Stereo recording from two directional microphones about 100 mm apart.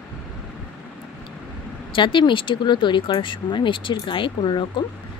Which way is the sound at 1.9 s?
55° left (ahead or behind).